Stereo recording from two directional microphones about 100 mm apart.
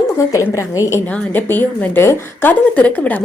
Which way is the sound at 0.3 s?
30° left (ahead or behind).